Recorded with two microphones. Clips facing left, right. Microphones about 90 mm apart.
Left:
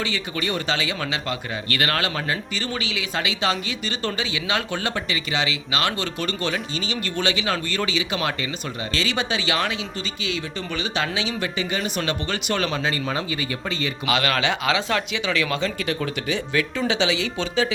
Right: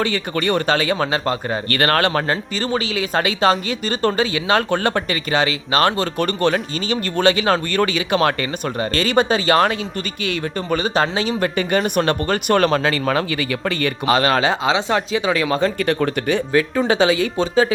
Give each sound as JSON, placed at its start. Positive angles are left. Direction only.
{"t": 0.0, "sound": "speech", "side_deg": -50}
{"t": 12.9, "sound": "speech", "side_deg": -75}
{"t": 14.1, "sound": "speech", "side_deg": -35}
{"t": 16.5, "sound": "speech", "side_deg": -40}